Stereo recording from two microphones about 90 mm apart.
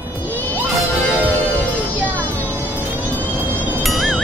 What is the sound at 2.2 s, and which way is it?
Music, 20° left (ahead or behind).